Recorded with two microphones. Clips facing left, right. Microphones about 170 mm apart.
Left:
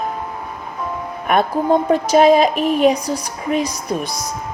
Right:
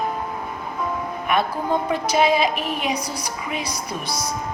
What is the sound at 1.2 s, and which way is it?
A woman's voice, 45° left (ahead or behind).